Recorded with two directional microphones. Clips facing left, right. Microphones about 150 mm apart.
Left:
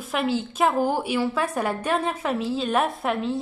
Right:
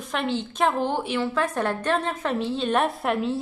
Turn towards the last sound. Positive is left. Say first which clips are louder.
# right 1 dB
turn(degrees=0)  # may be behind; listen again after turning